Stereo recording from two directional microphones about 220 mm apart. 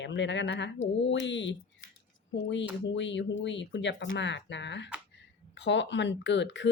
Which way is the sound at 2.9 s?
55° left (ahead or behind).